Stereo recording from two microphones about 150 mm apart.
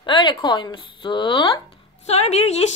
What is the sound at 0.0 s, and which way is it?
A woman's voice, 30° left (ahead or behind).